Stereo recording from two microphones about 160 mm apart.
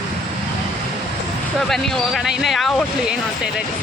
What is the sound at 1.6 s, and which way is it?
Speech, centre (ahead or behind).